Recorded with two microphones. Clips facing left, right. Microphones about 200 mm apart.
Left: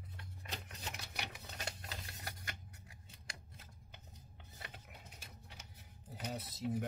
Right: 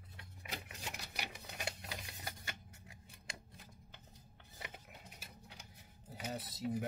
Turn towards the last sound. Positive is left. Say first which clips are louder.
# even
turn(degrees=0)  # may be behind; listen again after turning